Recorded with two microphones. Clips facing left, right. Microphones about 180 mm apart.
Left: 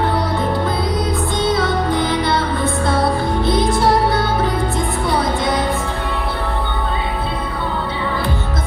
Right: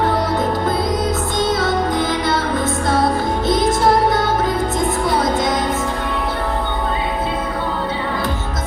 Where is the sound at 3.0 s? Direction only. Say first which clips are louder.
Even; 30° left (ahead or behind).